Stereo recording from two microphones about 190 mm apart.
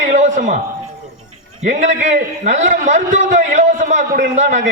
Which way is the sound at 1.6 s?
40° right (ahead or behind).